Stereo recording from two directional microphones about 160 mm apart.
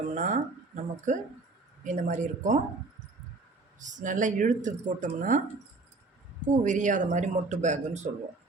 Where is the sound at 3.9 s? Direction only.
50° right (ahead or behind).